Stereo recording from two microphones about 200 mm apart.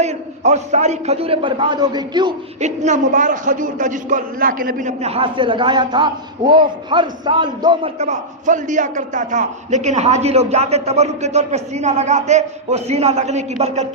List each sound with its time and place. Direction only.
0.0 s a man's voice: 35° right (ahead or behind)
2.6 s a man's voice: 35° right (ahead or behind)